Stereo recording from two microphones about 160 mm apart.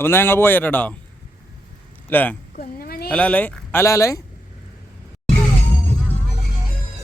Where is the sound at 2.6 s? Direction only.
70° left (ahead or behind).